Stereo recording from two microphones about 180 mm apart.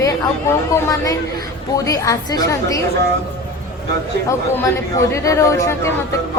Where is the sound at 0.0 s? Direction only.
15° left (ahead or behind).